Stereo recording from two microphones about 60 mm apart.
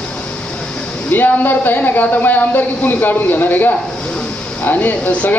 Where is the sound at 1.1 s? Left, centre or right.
Left.